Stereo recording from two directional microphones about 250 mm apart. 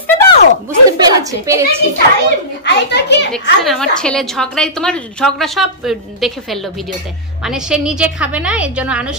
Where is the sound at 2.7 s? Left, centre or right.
Left.